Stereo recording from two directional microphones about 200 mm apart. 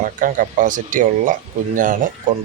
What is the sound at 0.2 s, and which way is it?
Speech, 40° right (ahead or behind).